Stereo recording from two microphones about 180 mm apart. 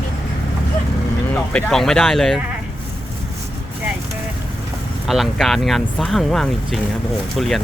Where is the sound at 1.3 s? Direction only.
5° left (ahead or behind).